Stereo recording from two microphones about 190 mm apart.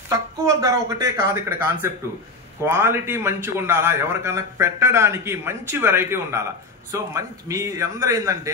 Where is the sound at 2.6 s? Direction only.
10° right (ahead or behind).